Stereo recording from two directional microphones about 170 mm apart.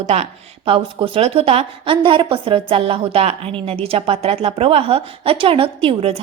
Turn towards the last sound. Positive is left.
turn(degrees=-35)  # may be behind; listen again after turning